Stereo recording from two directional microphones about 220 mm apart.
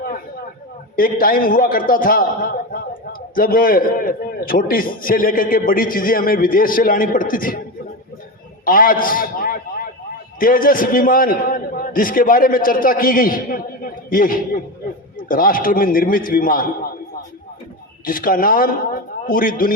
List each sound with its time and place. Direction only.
0.9 s a man's voice: 40° left (ahead or behind)
8.6 s a man's voice: 40° left (ahead or behind)
18.0 s a man's voice: 40° left (ahead or behind)